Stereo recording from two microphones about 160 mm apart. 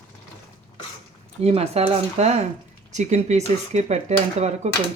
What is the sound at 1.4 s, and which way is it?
Speech, 40° right (ahead or behind).